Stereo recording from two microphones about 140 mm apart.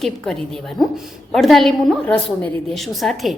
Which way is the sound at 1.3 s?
Centre (ahead or behind).